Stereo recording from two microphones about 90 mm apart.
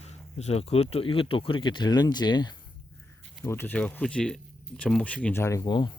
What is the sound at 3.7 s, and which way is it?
Speech, 10° left (ahead or behind).